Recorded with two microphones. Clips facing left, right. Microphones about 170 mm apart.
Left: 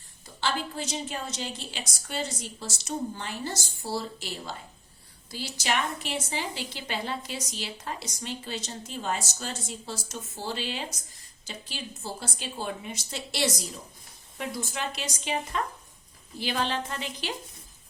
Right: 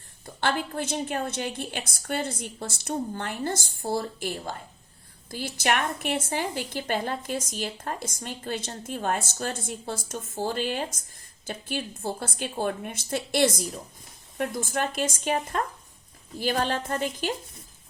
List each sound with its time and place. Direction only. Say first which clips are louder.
0.3 s a woman's voice: right 3 dB; 55° right (ahead or behind)